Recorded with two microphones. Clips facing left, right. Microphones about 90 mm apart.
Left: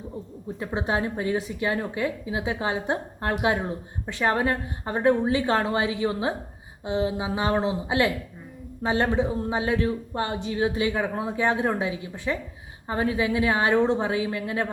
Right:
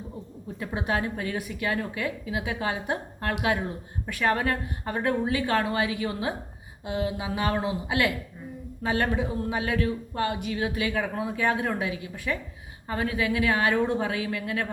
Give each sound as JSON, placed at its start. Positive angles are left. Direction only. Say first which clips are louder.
{"t": 0.6, "sound": "a man's voice", "louder": "left 2 dB", "side_deg": 25}